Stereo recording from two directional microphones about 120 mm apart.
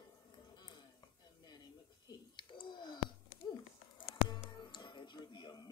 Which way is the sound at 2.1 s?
40° left (ahead or behind).